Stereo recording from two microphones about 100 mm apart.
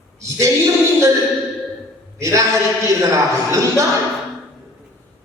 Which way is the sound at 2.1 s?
30° right (ahead or behind).